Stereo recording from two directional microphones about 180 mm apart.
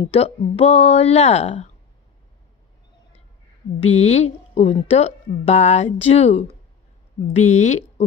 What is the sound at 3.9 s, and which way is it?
Speech, 35° left (ahead or behind).